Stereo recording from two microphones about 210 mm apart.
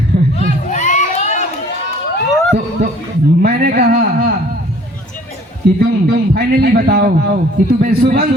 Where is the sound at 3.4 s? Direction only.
50° right (ahead or behind).